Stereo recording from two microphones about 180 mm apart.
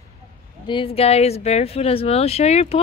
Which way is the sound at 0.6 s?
30° left (ahead or behind).